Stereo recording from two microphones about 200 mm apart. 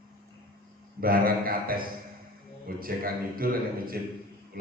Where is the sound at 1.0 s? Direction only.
45° right (ahead or behind).